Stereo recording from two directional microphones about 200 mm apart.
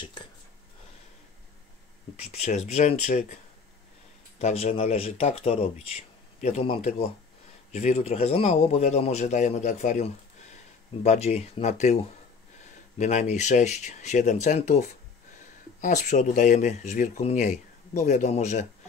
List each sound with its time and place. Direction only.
2.1 s speech: 35° left (ahead or behind)
4.4 s speech: 35° left (ahead or behind)